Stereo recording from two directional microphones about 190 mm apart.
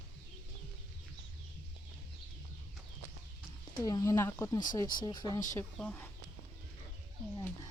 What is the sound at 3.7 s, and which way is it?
Speech, 20° left (ahead or behind).